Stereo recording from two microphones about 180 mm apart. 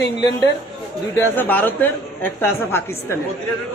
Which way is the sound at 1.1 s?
10° left (ahead or behind).